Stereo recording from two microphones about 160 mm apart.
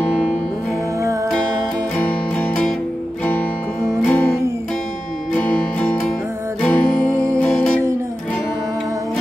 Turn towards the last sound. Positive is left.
turn(degrees=10)  # may be behind; listen again after turning